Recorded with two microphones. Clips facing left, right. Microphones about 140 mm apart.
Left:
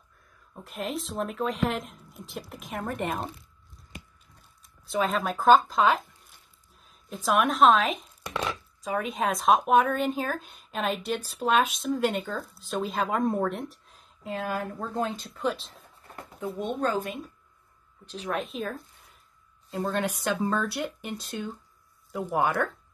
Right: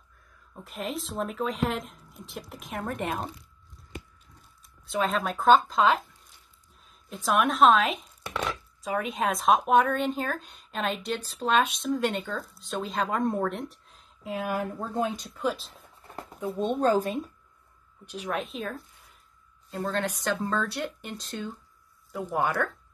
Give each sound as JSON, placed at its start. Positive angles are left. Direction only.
{"t": 0.6, "sound": "chopping", "side_deg": 0}
{"t": 4.8, "sound": "chopping", "side_deg": 0}
{"t": 7.1, "sound": "chopping", "side_deg": 0}
{"t": 14.3, "sound": "speech", "side_deg": -15}
{"t": 16.5, "sound": "speech", "side_deg": -25}
{"t": 16.9, "sound": "speech", "side_deg": -35}
{"t": 18.0, "sound": "speech", "side_deg": -10}
{"t": 18.3, "sound": "chopping", "side_deg": 0}
{"t": 19.7, "sound": "speech", "side_deg": 10}